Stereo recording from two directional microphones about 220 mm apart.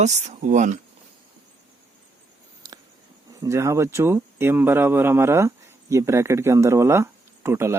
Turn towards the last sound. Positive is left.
turn(degrees=-10)  # may be behind; listen again after turning